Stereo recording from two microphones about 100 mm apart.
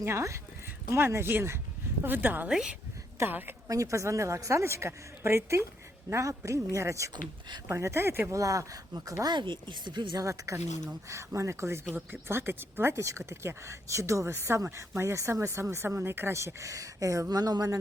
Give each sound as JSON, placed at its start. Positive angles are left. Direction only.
{"t": 0.0, "sound": "speech", "side_deg": -25}
{"t": 2.5, "sound": "a woman's voice", "side_deg": -5}
{"t": 3.2, "sound": "speech", "side_deg": -20}
{"t": 3.7, "sound": "speech", "side_deg": -30}
{"t": 10.2, "sound": "speech", "side_deg": -30}